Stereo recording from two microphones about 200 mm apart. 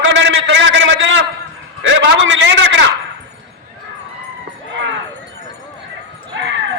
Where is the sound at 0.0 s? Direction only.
65° right (ahead or behind).